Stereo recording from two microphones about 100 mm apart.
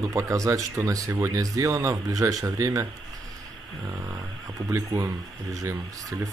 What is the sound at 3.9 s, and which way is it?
Speech, 30° right (ahead or behind).